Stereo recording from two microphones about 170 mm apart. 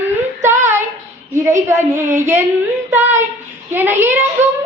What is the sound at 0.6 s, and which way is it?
Child singing, 15° right (ahead or behind).